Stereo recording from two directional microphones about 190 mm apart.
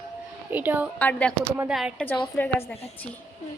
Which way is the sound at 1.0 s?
10° left (ahead or behind).